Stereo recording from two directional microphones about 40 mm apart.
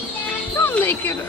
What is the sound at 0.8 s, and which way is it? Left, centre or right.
Speech, left.